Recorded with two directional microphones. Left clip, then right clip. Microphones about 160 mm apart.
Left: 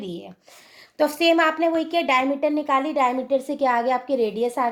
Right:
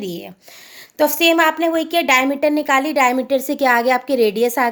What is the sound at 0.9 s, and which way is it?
A woman's voice, 20° right (ahead or behind).